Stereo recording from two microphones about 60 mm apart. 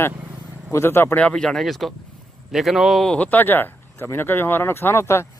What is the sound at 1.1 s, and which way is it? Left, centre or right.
Speech, centre.